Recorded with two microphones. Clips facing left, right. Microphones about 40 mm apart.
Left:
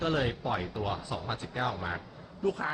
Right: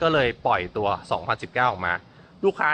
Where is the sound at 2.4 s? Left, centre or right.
Right.